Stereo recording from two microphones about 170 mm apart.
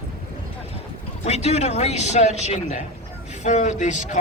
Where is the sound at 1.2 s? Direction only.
40° left (ahead or behind).